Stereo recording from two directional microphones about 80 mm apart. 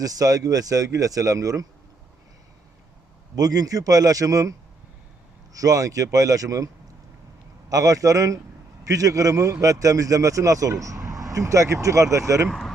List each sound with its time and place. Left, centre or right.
0.0 s a man's voice: right
3.3 s a man's voice: right
5.5 s a man's voice: right
7.7 s a man's voice: right
12.5 s speech: centre